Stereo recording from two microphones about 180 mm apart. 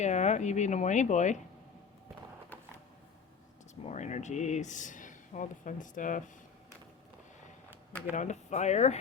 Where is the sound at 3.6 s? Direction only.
40° left (ahead or behind).